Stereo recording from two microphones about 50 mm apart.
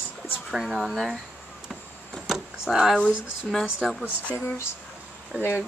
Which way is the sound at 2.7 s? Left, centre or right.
Centre.